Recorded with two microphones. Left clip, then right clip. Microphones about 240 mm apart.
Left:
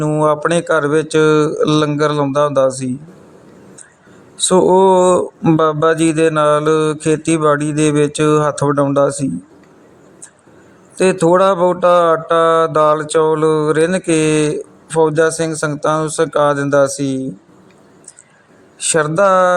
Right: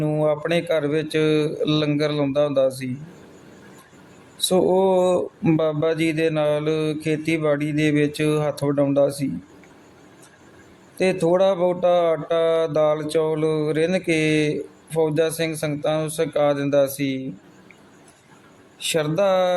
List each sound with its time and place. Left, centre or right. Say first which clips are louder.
0.0 s speech: left 7 dB; centre
4.4 s mantra: left 8 dB; centre
10.9 s mantra: left 7 dB; centre
18.8 s mantra: left 8 dB; centre